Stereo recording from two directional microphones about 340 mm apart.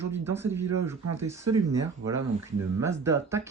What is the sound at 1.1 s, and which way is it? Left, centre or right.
Speech, centre.